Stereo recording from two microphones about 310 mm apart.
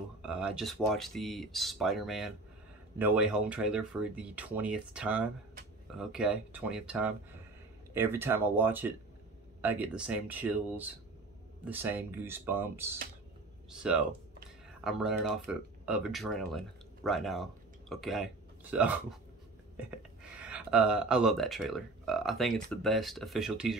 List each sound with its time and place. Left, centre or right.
0.2 s speech: centre